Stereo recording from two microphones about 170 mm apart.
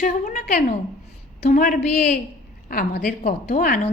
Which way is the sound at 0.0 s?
50° left (ahead or behind).